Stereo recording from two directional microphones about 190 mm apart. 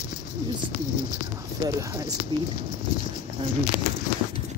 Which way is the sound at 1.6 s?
20° right (ahead or behind).